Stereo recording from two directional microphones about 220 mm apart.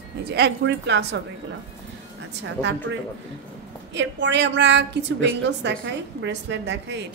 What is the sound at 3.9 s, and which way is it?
A woman's voice, 55° right (ahead or behind).